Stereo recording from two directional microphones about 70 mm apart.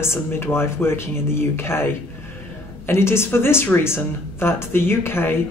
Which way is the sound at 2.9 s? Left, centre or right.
Left.